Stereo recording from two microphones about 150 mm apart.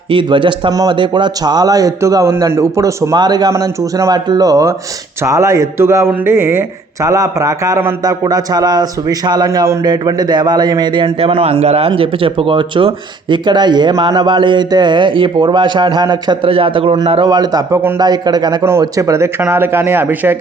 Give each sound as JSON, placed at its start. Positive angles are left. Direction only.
{"t": 0.1, "sound": "a man's voice", "side_deg": -35}